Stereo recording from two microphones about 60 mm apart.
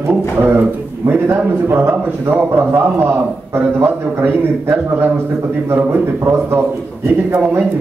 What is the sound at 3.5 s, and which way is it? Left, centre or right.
A man's voice, right.